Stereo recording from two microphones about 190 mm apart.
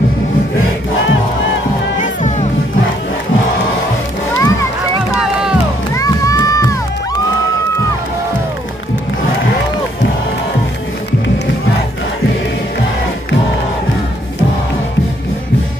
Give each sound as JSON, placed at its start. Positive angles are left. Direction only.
{"t": 4.4, "sound": "music", "side_deg": 15}
{"t": 5.1, "sound": "music", "side_deg": -5}
{"t": 5.9, "sound": "run", "side_deg": 15}